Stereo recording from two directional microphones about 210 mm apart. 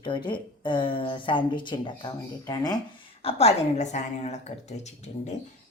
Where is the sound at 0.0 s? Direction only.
20° left (ahead or behind).